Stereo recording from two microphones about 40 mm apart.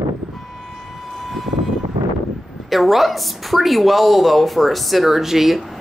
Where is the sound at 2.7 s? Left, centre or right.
Centre.